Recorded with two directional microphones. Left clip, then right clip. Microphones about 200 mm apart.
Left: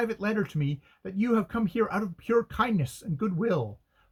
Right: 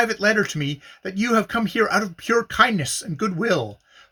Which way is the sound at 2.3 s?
20° right (ahead or behind).